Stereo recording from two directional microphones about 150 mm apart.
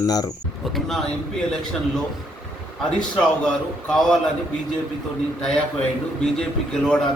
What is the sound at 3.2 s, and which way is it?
A man's voice, 5° left (ahead or behind).